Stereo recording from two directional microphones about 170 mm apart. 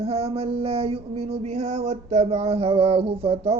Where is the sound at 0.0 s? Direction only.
35° right (ahead or behind).